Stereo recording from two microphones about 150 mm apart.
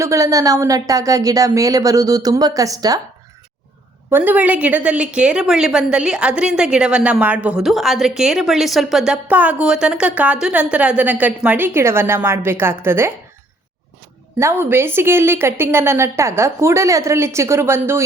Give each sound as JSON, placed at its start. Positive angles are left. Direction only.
{"t": 0.0, "sound": "speech", "side_deg": -20}
{"t": 4.1, "sound": "a woman's voice", "side_deg": -10}
{"t": 14.3, "sound": "a woman's voice", "side_deg": -15}